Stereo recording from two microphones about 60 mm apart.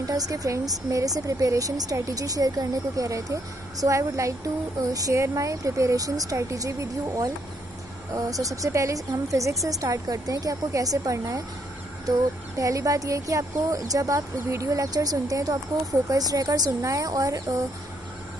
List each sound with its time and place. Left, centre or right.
0.0 s speech: right
8.3 s speech: right
12.5 s speech: right